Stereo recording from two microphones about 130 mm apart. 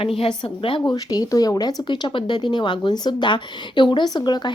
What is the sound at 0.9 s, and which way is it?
Speech, 30° left (ahead or behind).